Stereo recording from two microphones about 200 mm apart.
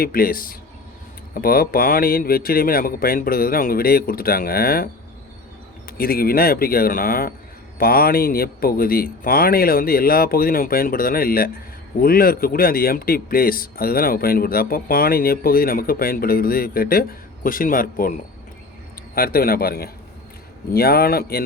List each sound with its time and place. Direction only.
0.0 s a man's voice: 45° left (ahead or behind)
6.0 s a man's voice: 50° left (ahead or behind)
19.1 s a man's voice: 45° left (ahead or behind)